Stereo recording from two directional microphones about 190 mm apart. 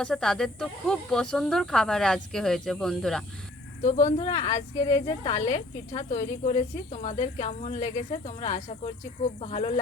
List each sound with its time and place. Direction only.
0.0 s speech: 5° left (ahead or behind)
3.8 s speech: 40° left (ahead or behind)